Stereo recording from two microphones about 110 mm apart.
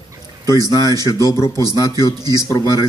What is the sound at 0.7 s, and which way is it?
Speech, 30° left (ahead or behind).